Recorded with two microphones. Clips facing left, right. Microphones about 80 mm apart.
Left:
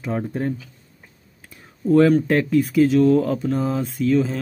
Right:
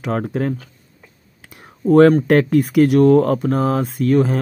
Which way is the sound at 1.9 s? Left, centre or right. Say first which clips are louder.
Right 4 dB; right.